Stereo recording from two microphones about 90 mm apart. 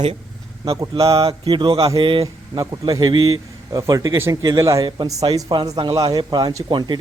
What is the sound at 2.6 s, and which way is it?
Speech, 45° right (ahead or behind).